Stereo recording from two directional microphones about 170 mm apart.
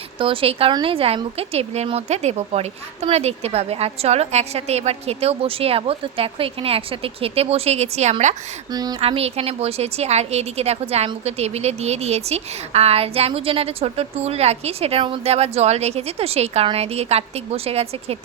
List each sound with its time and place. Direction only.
0.2 s a woman's voice: 30° right (ahead or behind)
8.7 s speech: 25° right (ahead or behind)
9.0 s a woman's voice: 35° right (ahead or behind)